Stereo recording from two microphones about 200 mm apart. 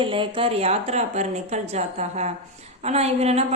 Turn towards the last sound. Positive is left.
turn(degrees=-30)  # may be behind; listen again after turning